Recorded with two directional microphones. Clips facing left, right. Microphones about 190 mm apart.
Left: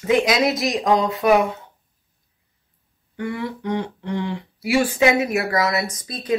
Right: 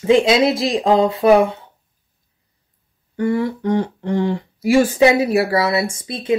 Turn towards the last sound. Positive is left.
turn(degrees=-25)  # may be behind; listen again after turning